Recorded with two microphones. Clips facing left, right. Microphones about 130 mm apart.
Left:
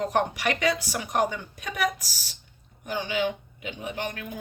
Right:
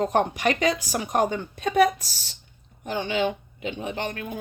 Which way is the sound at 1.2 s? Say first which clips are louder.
Right 3 dB; 50° right (ahead or behind).